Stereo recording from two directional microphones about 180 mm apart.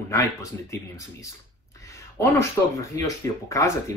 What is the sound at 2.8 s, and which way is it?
Speech, 20° left (ahead or behind).